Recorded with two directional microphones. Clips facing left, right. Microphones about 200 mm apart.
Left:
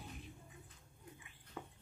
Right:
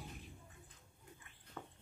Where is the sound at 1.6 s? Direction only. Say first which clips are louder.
Left 2 dB; 10° left (ahead or behind).